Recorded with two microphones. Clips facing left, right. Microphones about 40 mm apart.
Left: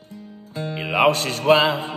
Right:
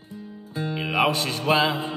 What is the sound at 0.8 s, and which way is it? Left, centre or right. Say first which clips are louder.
Music: left 4 dB; left.